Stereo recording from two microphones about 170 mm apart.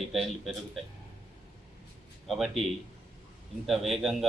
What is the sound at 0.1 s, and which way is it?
Speech, centre (ahead or behind).